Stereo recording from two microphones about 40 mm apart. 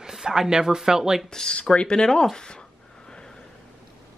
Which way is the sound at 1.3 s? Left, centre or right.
Centre.